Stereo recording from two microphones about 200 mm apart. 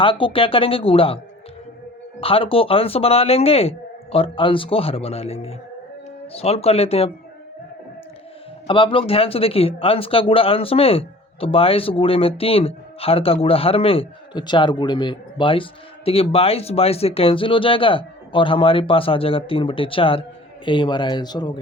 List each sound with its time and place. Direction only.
0.0 s speech: 25° left (ahead or behind)
2.2 s speech: 25° left (ahead or behind)
8.6 s speech: 25° left (ahead or behind)